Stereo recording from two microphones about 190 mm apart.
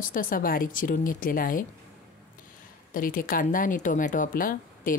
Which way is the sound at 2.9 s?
45° left (ahead or behind).